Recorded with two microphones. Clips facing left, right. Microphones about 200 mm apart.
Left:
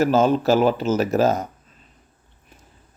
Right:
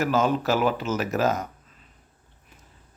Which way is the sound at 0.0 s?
30° left (ahead or behind).